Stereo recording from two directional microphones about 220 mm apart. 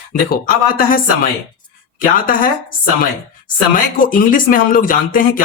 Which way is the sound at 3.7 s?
40° left (ahead or behind).